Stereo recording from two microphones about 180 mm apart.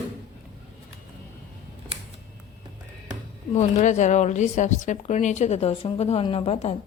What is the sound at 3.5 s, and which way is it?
Speech, 40° left (ahead or behind).